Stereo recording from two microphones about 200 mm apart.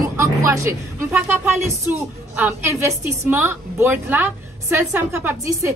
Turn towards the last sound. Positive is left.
turn(degrees=-15)  # may be behind; listen again after turning